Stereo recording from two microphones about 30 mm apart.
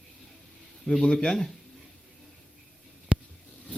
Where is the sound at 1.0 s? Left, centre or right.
Left.